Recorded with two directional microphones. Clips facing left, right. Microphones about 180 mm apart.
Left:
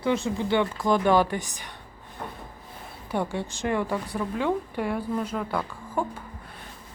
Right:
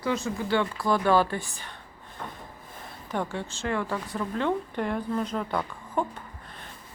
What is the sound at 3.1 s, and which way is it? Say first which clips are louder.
A woman's voice: left 3 dB; 10° left (ahead or behind).